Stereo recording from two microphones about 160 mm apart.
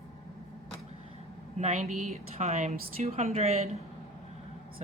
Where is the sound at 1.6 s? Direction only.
45° right (ahead or behind).